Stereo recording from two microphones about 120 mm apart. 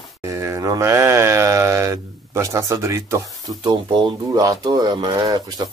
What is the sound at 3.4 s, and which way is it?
Speech, 40° right (ahead or behind).